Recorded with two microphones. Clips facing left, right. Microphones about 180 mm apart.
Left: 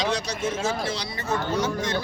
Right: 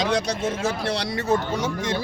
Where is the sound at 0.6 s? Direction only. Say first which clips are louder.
Right 2 dB; 60° right (ahead or behind).